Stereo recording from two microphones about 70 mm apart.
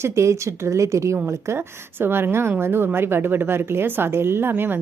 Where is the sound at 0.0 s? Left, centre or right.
Right.